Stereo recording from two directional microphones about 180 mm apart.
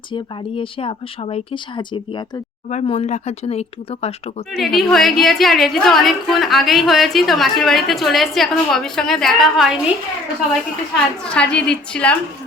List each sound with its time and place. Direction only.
0.1 s speech: 30° left (ahead or behind)
4.5 s a woman's voice: centre (ahead or behind)
10.9 s a woman's voice: 5° left (ahead or behind)